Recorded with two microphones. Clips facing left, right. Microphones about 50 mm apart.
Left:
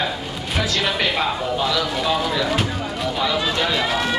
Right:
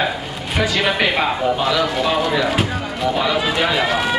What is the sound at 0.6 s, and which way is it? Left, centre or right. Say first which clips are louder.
A man's voice: right 4 dB; centre.